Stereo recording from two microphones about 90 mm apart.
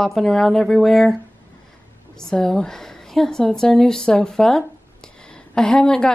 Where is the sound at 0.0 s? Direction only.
5° left (ahead or behind).